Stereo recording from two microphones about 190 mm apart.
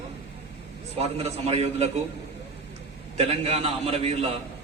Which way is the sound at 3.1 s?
30° right (ahead or behind).